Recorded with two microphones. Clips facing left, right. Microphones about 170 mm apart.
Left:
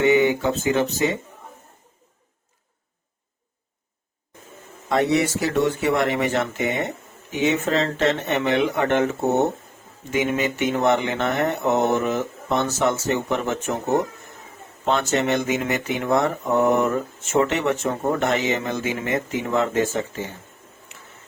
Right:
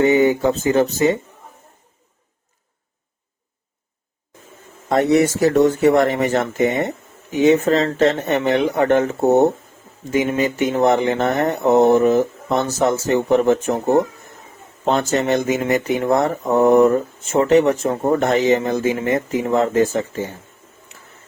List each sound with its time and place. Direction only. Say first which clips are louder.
0.0 s speech: right 3 dB; 40° right (ahead or behind)
4.9 s speech: right 5 dB; 45° right (ahead or behind)
10.1 s speech: right 4 dB; 40° right (ahead or behind)
14.8 s speech: right 3 dB; 40° right (ahead or behind)